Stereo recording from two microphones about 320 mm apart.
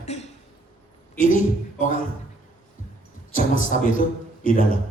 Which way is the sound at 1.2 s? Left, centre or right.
Left.